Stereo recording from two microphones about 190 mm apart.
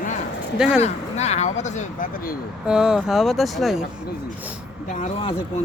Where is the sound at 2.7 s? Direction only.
5° right (ahead or behind).